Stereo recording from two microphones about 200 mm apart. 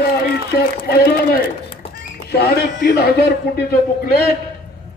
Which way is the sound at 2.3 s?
55° left (ahead or behind).